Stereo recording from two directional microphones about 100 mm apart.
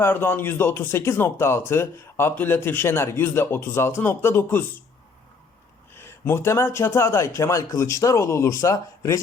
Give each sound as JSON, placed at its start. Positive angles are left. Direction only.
{"t": 0.0, "sound": "speech", "side_deg": 20}
{"t": 5.9, "sound": "speech", "side_deg": 25}